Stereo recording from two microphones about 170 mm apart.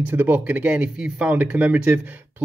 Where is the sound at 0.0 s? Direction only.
10° right (ahead or behind).